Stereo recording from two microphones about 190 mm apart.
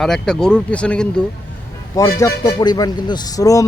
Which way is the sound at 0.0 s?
5° left (ahead or behind).